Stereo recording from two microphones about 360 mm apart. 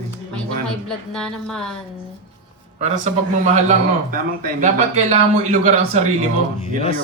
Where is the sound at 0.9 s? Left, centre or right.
Centre.